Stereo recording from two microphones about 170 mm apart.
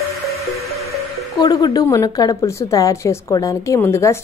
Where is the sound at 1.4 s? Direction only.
20° left (ahead or behind).